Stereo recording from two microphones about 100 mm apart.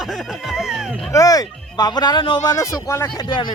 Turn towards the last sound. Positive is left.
turn(degrees=30)  # may be behind; listen again after turning